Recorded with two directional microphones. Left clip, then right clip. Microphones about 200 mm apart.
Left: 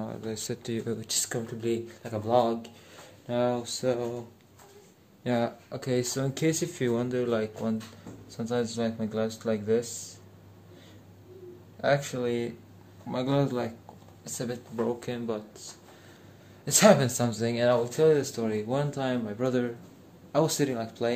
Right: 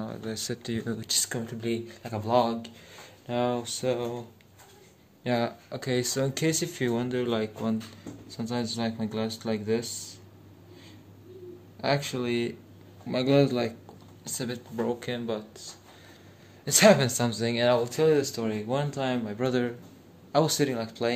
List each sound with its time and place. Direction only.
0.0 s speech: 5° left (ahead or behind)
5.2 s speech: 5° left (ahead or behind)
11.8 s speech: centre (ahead or behind)